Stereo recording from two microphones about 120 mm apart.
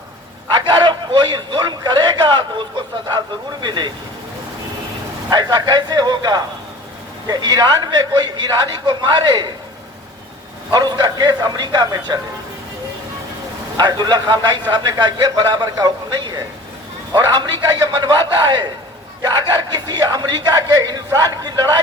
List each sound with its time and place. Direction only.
0.5 s a man's voice: 40° right (ahead or behind)
5.3 s a man's voice: 35° right (ahead or behind)
10.7 s a man's voice: 35° right (ahead or behind)
13.7 s a man's voice: 35° right (ahead or behind)